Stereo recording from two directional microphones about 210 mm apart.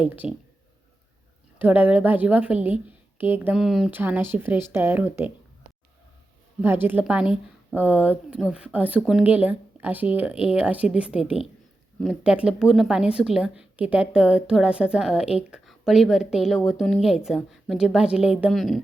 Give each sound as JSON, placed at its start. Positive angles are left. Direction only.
{"t": 0.0, "sound": "speech", "side_deg": -5}
{"t": 1.5, "sound": "speech", "side_deg": -10}
{"t": 6.6, "sound": "speech", "side_deg": -10}